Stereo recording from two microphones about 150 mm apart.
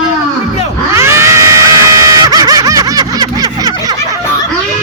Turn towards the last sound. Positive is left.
turn(degrees=-25)  # may be behind; listen again after turning